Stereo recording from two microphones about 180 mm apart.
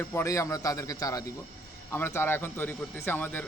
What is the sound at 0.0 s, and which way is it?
A man's voice, 15° left (ahead or behind).